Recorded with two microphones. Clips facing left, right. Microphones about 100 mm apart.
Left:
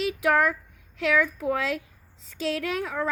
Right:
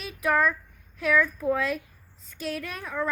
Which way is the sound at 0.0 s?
90° left.